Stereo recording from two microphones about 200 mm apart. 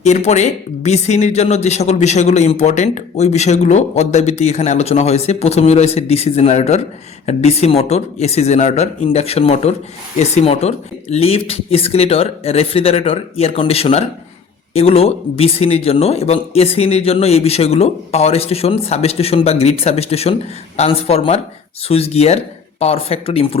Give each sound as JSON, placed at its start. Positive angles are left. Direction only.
{"t": 0.0, "sound": "speech", "side_deg": 35}